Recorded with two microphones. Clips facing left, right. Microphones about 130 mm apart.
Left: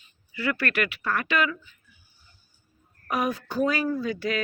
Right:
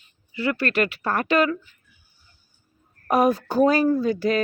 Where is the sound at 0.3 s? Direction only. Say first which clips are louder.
Right 4 dB; 25° right (ahead or behind).